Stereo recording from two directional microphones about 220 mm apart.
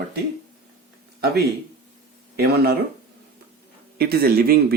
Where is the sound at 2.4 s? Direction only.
45° right (ahead or behind).